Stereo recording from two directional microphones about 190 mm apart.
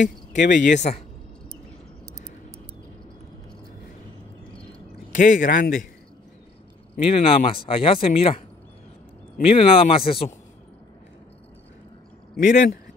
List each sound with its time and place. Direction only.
0.0 s speech: 40° left (ahead or behind)
5.1 s speech: 45° left (ahead or behind)
7.1 s speech: 30° left (ahead or behind)
9.4 s speech: 30° left (ahead or behind)
12.4 s speech: 40° left (ahead or behind)